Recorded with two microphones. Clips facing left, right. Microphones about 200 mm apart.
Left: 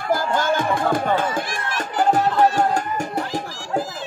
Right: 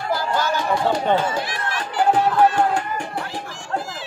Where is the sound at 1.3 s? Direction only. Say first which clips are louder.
Even; 45° left (ahead or behind).